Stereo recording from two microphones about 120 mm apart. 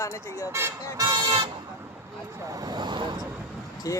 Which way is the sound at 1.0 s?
40° right (ahead or behind).